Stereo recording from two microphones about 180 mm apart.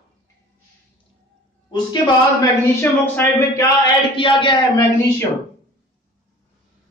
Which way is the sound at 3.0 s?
10° left (ahead or behind).